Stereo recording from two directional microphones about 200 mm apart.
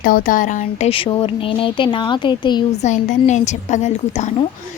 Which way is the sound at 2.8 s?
35° left (ahead or behind).